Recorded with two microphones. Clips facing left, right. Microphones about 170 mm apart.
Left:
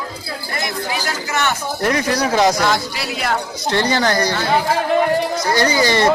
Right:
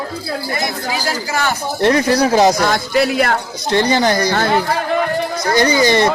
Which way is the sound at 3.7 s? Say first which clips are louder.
Right 3 dB; 15° right (ahead or behind).